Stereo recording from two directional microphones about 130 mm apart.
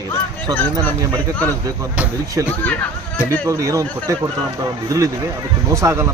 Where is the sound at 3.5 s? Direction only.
25° right (ahead or behind).